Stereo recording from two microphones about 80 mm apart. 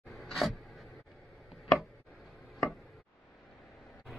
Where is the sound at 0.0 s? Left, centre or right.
Centre.